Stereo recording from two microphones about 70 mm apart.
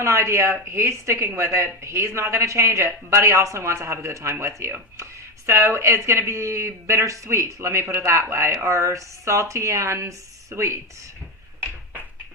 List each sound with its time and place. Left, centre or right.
0.0 s speech: right